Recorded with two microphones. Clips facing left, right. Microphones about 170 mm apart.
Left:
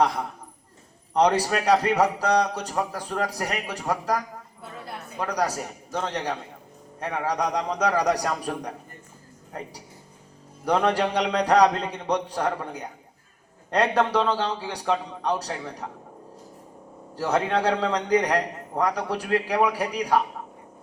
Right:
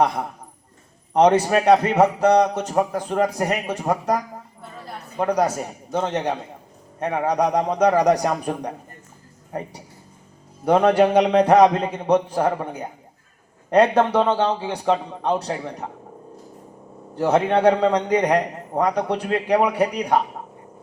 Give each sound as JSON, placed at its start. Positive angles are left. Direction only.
{"t": 1.1, "sound": "a man's voice", "side_deg": -25}
{"t": 11.4, "sound": "a man's voice", "side_deg": -20}
{"t": 17.2, "sound": "a man's voice", "side_deg": -20}